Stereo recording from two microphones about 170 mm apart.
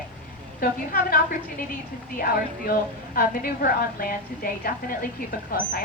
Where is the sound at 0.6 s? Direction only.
60° left (ahead or behind).